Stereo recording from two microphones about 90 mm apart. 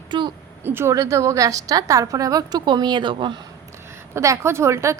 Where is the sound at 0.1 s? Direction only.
60° right (ahead or behind).